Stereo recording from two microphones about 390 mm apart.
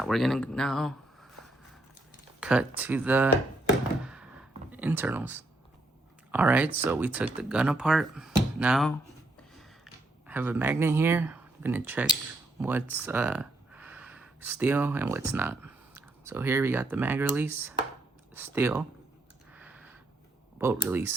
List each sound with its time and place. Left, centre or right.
0.0 s speech: centre
2.4 s speech: centre
4.0 s thunk: centre
4.7 s speech: centre
9.6 s a sound: centre
12.6 s speech: centre
19.5 s a sound: centre
20.6 s speech: centre